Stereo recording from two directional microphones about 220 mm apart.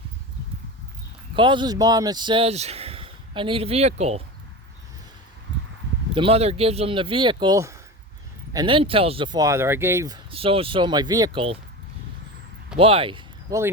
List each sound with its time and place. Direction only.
1.4 s speech: 20° right (ahead or behind)
6.1 s speech: 25° right (ahead or behind)
10.3 s speech: 25° right (ahead or behind)
12.7 s speech: 25° right (ahead or behind)